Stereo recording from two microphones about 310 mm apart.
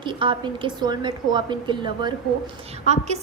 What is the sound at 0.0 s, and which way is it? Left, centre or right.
A woman's voice, centre.